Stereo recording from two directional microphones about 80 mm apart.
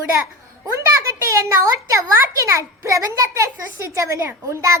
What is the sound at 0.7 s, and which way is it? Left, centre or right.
A child's voice, right.